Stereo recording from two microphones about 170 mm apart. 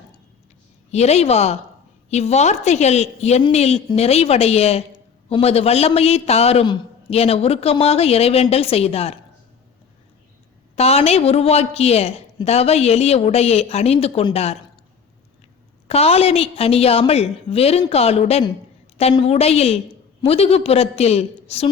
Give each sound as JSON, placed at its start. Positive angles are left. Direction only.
{"t": 0.9, "sound": "a man's voice", "side_deg": 40}
{"t": 10.8, "sound": "a man's voice", "side_deg": 35}
{"t": 15.9, "sound": "a man's voice", "side_deg": 35}